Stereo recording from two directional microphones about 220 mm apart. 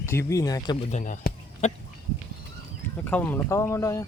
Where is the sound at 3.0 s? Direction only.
10° left (ahead or behind).